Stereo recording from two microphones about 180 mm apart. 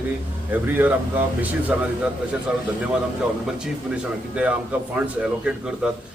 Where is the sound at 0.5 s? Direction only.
10° right (ahead or behind).